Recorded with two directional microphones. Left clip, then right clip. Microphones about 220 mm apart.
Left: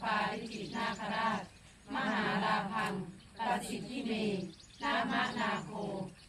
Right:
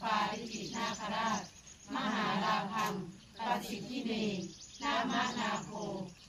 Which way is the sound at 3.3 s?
15° left (ahead or behind).